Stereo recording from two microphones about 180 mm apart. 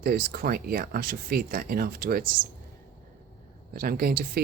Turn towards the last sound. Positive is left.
turn(degrees=-60)  # may be behind; listen again after turning